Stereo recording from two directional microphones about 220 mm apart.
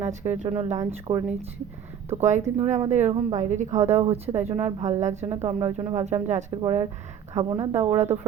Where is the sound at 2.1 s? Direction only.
30° right (ahead or behind).